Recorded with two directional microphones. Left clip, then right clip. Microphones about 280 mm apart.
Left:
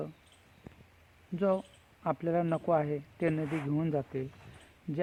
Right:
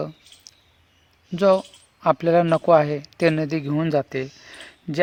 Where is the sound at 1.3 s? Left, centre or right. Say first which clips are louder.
Right 13 dB; right.